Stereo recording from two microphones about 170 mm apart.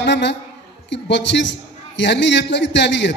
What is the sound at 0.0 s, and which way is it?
A man's voice, 90° left.